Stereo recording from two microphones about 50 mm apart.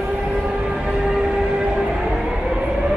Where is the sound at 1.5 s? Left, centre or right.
Right.